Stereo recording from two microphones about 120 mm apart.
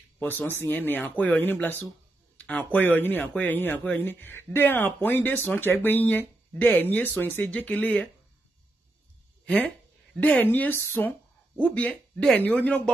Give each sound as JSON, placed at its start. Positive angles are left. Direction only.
{"t": 0.2, "sound": "speech", "side_deg": 20}
{"t": 10.2, "sound": "speech", "side_deg": 15}